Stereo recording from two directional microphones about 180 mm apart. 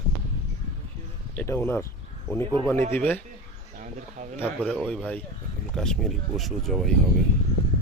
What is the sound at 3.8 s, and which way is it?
Speech, 45° right (ahead or behind).